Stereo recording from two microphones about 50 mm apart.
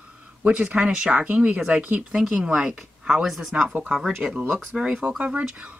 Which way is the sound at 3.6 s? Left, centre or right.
Right.